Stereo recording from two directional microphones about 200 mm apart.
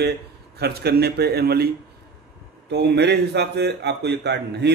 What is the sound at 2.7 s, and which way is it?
A man's voice, 55° right (ahead or behind).